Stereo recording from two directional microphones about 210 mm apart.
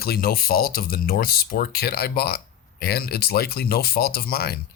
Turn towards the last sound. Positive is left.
turn(degrees=45)  # may be behind; listen again after turning